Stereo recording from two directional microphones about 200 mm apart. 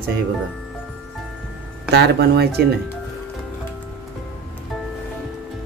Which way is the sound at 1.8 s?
55° right (ahead or behind).